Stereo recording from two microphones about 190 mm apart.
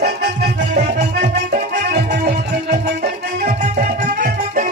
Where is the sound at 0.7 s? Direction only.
40° right (ahead or behind).